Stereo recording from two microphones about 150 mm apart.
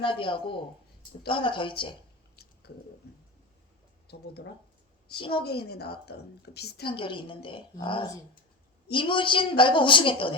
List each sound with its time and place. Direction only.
0.0 s a woman's voice: 35° left (ahead or behind)
2.3 s a sound: 90° left
4.0 s speech: 90° left
6.8 s a woman's voice: 35° left (ahead or behind)